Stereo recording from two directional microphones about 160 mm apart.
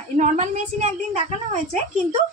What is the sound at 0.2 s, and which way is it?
A woman's voice, 45° right (ahead or behind).